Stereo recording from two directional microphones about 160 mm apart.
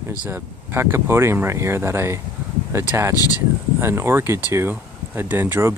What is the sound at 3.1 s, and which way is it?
Speech, 20° left (ahead or behind).